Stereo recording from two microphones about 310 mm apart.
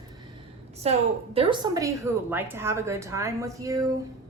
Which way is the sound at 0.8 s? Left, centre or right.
Centre.